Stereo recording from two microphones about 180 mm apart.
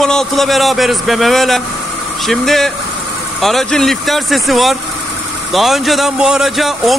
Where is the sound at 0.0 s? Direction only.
Centre (ahead or behind).